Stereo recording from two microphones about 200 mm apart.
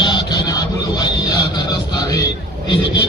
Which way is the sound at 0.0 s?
20° left (ahead or behind).